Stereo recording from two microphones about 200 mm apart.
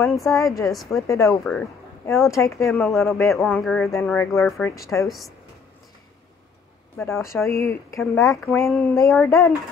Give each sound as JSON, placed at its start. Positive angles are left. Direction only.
{"t": 0.1, "sound": "a woman's voice", "side_deg": 0}
{"t": 1.0, "sound": "speech", "side_deg": 15}
{"t": 1.3, "sound": "a woman's voice", "side_deg": 0}
{"t": 2.2, "sound": "a woman's voice", "side_deg": 15}
{"t": 4.7, "sound": "speech", "side_deg": 15}
{"t": 5.0, "sound": "a woman's voice", "side_deg": 0}
{"t": 7.0, "sound": "speech", "side_deg": 15}